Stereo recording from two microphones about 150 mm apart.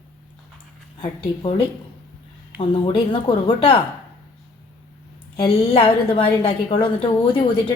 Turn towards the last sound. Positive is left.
turn(degrees=35)  # may be behind; listen again after turning